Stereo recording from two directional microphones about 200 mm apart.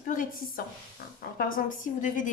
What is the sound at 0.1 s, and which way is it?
A woman's voice, 40° left (ahead or behind).